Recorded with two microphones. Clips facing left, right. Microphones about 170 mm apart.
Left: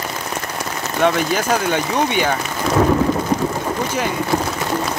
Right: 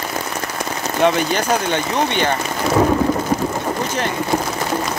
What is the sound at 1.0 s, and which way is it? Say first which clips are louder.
Speech: right 1 dB; centre (ahead or behind).